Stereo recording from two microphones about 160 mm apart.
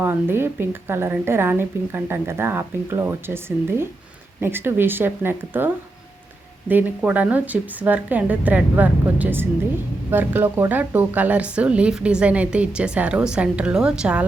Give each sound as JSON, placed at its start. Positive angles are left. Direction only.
{"t": 0.0, "sound": "a woman's voice", "side_deg": -15}